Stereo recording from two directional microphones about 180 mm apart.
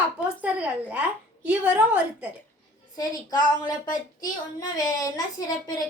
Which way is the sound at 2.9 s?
20° left (ahead or behind).